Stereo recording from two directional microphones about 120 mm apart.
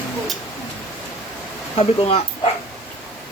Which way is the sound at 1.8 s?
55° left (ahead or behind).